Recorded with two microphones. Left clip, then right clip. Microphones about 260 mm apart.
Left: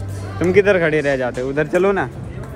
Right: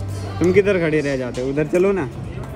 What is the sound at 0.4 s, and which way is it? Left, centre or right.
Speech, centre.